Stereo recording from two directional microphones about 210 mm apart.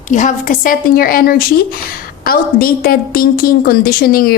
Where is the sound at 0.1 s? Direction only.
35° left (ahead or behind).